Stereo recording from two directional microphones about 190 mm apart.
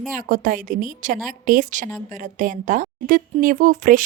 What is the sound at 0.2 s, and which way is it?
A woman's voice, 45° right (ahead or behind).